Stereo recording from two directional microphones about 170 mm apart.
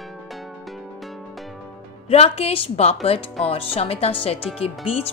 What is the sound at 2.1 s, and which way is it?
Speech, 35° left (ahead or behind).